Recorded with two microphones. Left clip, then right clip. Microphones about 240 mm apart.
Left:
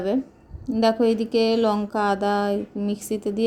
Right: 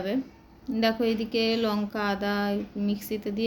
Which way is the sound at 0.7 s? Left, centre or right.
Left.